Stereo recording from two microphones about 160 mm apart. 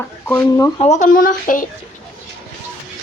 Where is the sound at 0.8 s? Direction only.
45° left (ahead or behind).